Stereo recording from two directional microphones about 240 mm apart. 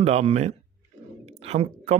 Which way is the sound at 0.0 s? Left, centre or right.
Right.